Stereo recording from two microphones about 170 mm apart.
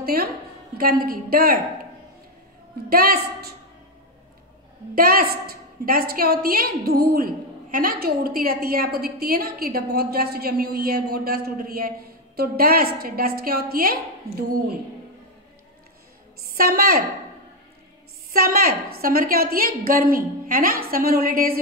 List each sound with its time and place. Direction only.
0.0 s a woman's voice: 60° right (ahead or behind)
2.9 s a woman's voice: 60° right (ahead or behind)
4.9 s a woman's voice: 60° right (ahead or behind)
16.5 s a woman's voice: 60° right (ahead or behind)
18.3 s a woman's voice: 60° right (ahead or behind)